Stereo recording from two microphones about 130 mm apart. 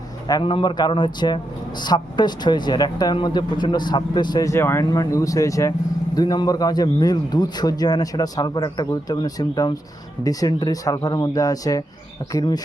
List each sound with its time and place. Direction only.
0.4 s speech: 40° left (ahead or behind)